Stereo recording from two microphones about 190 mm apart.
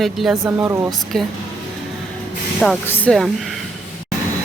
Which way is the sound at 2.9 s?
5° left (ahead or behind).